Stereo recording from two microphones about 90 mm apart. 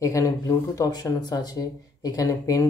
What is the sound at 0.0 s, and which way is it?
Speech, 35° left (ahead or behind).